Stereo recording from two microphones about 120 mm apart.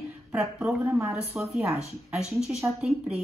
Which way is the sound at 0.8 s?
20° right (ahead or behind).